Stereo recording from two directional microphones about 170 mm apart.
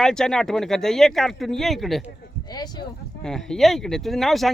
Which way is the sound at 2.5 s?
25° left (ahead or behind).